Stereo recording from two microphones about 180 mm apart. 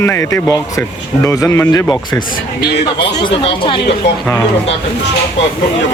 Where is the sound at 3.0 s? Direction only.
25° left (ahead or behind).